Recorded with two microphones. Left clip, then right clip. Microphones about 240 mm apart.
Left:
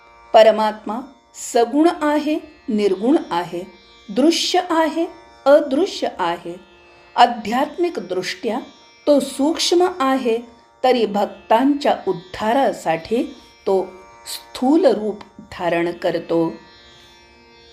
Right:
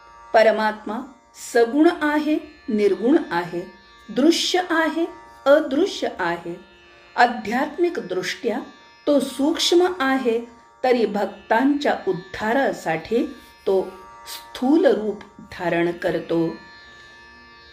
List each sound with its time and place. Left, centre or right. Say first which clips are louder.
0.3 s speech: left 4 dB; left
7.5 s speech: left 2 dB; left
14.3 s speech: left 3 dB; left